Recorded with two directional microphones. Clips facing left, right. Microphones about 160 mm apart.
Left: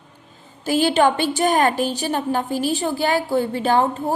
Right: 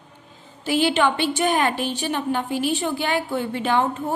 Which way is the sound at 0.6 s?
40° left (ahead or behind).